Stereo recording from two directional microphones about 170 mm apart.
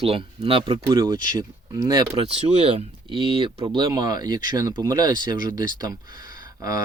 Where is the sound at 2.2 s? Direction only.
35° right (ahead or behind).